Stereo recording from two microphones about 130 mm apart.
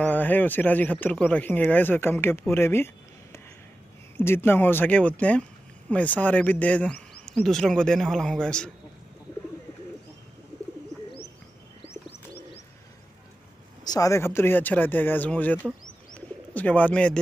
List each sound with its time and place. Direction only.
0.0 s speech: 15° left (ahead or behind)
4.2 s speech: 20° left (ahead or behind)
13.8 s speech: 25° left (ahead or behind)
16.2 s bird: 10° left (ahead or behind)